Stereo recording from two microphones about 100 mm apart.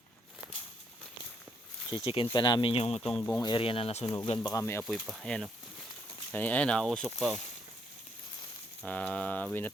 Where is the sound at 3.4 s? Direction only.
45° left (ahead or behind).